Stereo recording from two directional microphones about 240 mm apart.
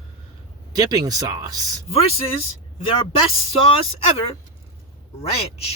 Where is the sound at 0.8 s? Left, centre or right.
Centre.